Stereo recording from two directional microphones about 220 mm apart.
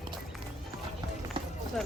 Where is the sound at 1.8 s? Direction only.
Centre (ahead or behind).